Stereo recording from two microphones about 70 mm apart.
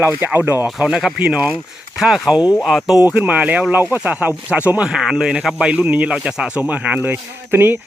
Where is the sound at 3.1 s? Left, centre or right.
Centre.